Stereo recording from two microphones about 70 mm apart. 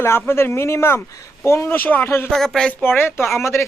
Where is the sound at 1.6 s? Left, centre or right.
Left.